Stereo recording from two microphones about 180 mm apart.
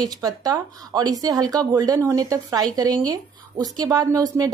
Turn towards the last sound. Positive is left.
turn(degrees=-20)  # may be behind; listen again after turning